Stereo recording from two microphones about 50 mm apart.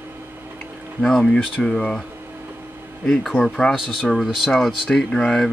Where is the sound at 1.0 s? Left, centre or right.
Centre.